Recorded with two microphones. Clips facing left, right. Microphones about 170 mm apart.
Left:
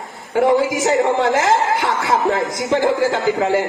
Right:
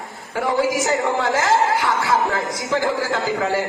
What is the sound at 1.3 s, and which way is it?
A man's voice, 25° left (ahead or behind).